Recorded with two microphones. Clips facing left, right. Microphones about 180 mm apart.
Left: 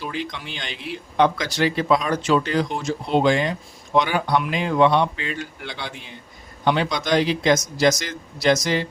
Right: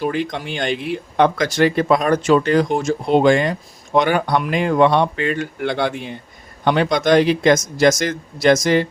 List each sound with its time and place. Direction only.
0.0 s speech: 50° right (ahead or behind)